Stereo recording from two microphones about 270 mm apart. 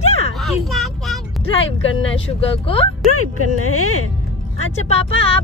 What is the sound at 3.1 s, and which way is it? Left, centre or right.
Speech, left.